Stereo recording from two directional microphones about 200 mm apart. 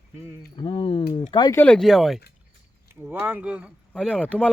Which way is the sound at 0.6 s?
25° left (ahead or behind).